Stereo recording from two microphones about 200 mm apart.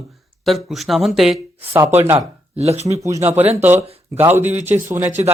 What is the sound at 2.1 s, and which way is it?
Speech, 30° right (ahead or behind).